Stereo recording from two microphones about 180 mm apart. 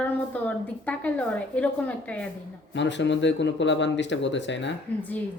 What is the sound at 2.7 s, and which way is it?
Speech, 85° left.